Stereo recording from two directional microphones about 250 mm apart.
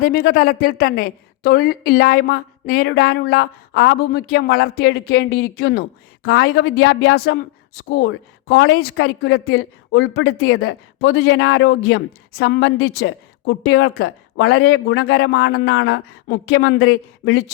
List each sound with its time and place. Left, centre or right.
0.0 s a woman's voice: left
12.9 s a woman's voice: left
13.7 s a woman's voice: left